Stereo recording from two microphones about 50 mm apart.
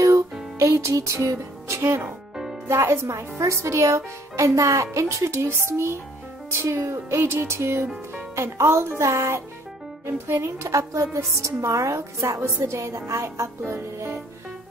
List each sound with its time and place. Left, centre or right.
0.6 s music: right
1.1 s music: right
2.7 s speech: right
5.7 s music: right
8.4 s speech: right
10.0 s speech: right